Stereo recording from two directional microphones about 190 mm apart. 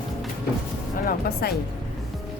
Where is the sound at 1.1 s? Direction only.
55° left (ahead or behind).